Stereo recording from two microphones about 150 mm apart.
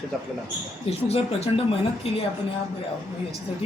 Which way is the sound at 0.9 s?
40° left (ahead or behind).